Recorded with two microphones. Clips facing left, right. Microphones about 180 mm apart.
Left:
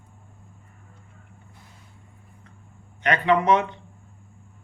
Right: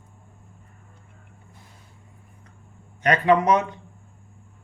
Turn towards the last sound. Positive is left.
turn(degrees=-40)  # may be behind; listen again after turning